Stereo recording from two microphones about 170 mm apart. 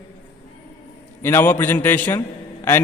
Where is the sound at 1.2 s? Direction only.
10° left (ahead or behind).